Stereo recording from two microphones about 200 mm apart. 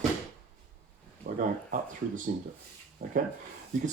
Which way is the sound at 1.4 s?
40° right (ahead or behind).